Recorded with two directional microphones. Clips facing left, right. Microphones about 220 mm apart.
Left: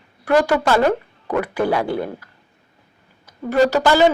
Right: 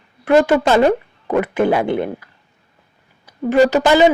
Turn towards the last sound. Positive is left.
turn(degrees=-20)  # may be behind; listen again after turning